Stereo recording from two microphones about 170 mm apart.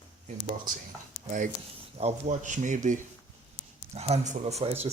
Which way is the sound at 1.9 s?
40° right (ahead or behind).